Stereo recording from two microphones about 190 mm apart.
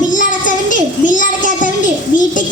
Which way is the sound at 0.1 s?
45° left (ahead or behind).